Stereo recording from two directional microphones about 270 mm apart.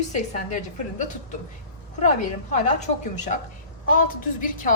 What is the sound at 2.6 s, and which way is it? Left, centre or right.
A woman's voice, left.